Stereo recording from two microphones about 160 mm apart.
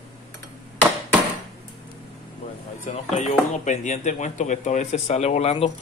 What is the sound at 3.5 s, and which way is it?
Speech, 50° left (ahead or behind).